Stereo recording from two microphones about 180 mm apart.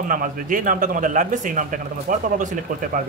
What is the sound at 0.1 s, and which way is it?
A man's voice, 45° right (ahead or behind).